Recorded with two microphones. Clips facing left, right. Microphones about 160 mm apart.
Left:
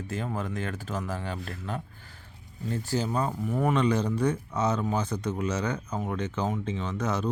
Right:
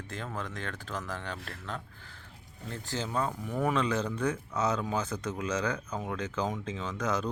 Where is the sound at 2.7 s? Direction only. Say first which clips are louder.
Left 5 dB; 10° left (ahead or behind).